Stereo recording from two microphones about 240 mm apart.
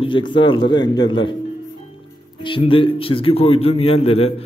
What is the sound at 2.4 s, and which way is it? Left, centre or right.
A man's voice, left.